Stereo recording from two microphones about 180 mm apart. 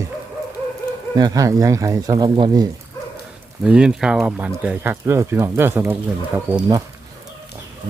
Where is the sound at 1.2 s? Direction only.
20° right (ahead or behind).